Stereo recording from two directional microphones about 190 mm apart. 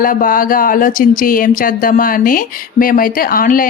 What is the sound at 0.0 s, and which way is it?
Speech, 45° left (ahead or behind).